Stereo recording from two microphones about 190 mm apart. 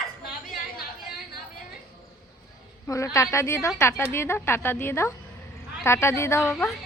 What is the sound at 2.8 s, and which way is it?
A woman's voice, 15° left (ahead or behind).